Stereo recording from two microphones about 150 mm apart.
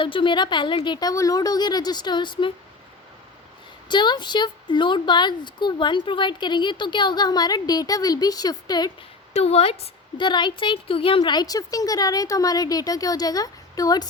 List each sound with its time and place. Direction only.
0.0 s speech: 35° left (ahead or behind)
3.8 s speech: 30° left (ahead or behind)
9.3 s speech: 45° left (ahead or behind); by 14.1 s 25° left (ahead or behind)